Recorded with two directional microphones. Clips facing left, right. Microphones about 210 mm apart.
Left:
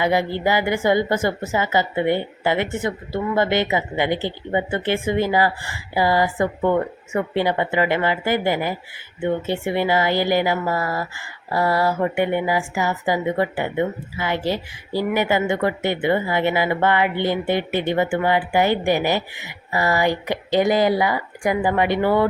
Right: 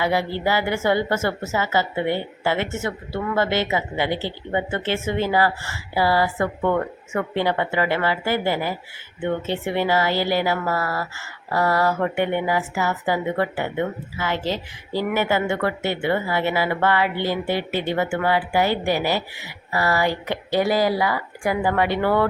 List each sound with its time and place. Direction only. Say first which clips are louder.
0.0 s speech: left 2 dB; 15° left (ahead or behind)